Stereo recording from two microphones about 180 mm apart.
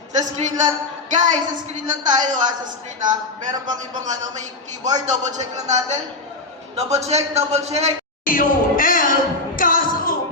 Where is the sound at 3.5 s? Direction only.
20° right (ahead or behind).